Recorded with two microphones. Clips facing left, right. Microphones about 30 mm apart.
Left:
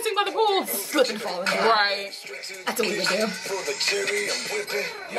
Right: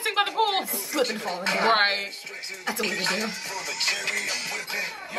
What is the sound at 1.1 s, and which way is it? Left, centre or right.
Speech, left.